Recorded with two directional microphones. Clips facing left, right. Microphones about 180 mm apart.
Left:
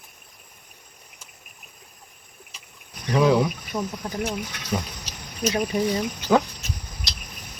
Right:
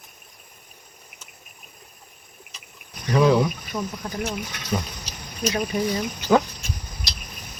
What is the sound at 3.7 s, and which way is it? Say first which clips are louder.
Speech: left 1 dB; 25° left (ahead or behind).